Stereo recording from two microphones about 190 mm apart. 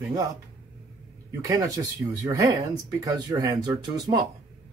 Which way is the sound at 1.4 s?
15° right (ahead or behind).